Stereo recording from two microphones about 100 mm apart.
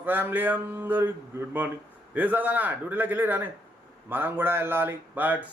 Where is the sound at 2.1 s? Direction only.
15° right (ahead or behind).